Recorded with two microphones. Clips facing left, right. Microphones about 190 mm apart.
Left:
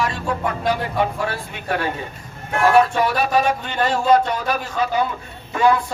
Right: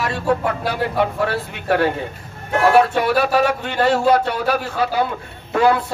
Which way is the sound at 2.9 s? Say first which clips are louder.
Right 2 dB; 65° right (ahead or behind).